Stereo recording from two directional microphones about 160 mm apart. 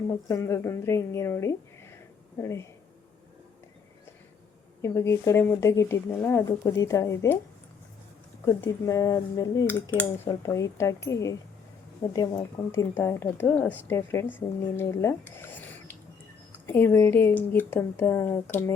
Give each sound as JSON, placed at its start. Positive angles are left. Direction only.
{"t": 0.1, "sound": "speech", "side_deg": 20}
{"t": 4.8, "sound": "speech", "side_deg": 15}
{"t": 8.4, "sound": "speech", "side_deg": 20}